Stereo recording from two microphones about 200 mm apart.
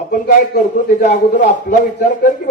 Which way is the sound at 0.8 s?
40° left (ahead or behind).